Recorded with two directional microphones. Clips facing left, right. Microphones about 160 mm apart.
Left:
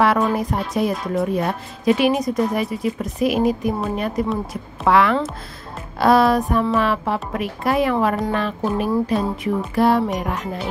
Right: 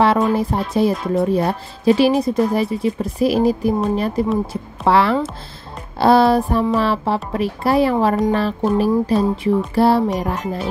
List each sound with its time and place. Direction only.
0.4 s a woman's voice: 30° right (ahead or behind)
5.9 s music: 30° right (ahead or behind)
6.7 s a woman's voice: 30° right (ahead or behind)